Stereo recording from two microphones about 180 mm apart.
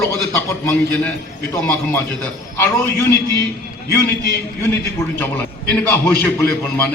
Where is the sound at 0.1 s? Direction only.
15° left (ahead or behind).